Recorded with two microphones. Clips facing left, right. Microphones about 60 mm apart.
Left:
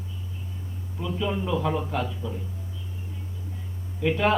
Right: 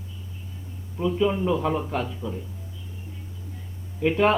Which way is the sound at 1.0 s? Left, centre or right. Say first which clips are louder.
Right 6 dB; centre.